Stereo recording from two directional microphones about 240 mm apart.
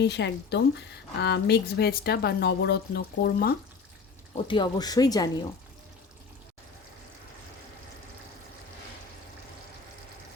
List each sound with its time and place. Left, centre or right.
0.0 s a woman's voice: left
4.4 s speech: centre